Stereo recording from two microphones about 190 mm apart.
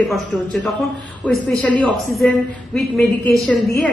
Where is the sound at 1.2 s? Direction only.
5° left (ahead or behind).